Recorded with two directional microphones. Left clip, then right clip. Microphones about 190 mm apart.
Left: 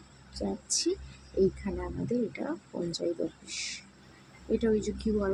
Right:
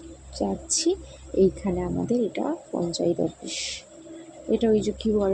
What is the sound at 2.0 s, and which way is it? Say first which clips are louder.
Speech: right 6 dB; 20° right (ahead or behind).